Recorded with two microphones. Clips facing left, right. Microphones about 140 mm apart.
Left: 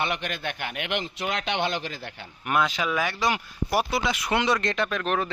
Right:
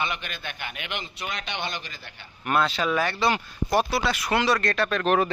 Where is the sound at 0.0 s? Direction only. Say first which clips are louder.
Left 3 dB; 70° left (ahead or behind); by 1.8 s 90° left.